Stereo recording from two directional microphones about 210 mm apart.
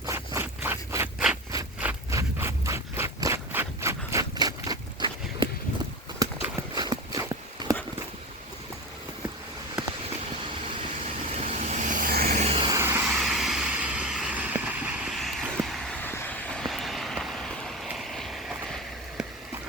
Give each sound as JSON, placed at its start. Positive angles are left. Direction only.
{"t": 0.0, "sound": "a sound", "side_deg": -15}
{"t": 1.5, "sound": "scrape", "side_deg": -10}
{"t": 6.1, "sound": "clip-clop", "side_deg": -20}
{"t": 11.3, "sound": "vehicle", "side_deg": -35}